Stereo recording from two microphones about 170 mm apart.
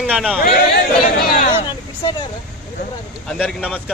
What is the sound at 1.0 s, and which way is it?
Speech, 60° left (ahead or behind).